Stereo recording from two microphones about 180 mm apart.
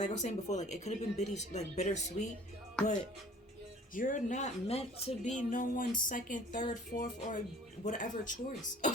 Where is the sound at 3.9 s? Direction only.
45° left (ahead or behind).